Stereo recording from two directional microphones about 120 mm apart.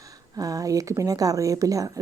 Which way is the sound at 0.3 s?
30° right (ahead or behind).